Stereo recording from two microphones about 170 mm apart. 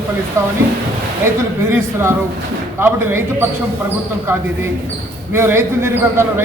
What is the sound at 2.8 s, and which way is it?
Speech, 15° right (ahead or behind).